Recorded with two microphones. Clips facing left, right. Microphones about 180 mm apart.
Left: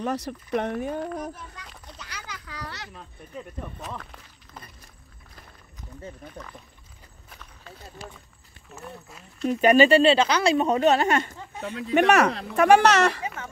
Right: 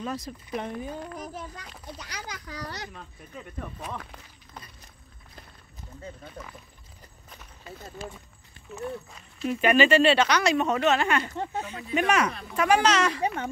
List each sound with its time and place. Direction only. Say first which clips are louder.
0.0 s speech: left 5 dB; 70° left (ahead or behind)
2.0 s children playing: right 2 dB; 40° right (ahead or behind)
2.9 s speech: left 2 dB; centre (ahead or behind)
8.7 s speech: right 7 dB; centre (ahead or behind)
9.5 s speech: left 4 dB; 40° left (ahead or behind)
11.3 s speech: right 9 dB; 70° right (ahead or behind)
11.6 s speech: left 8 dB; 65° left (ahead or behind)
12.5 s speech: left 5 dB; 60° left (ahead or behind)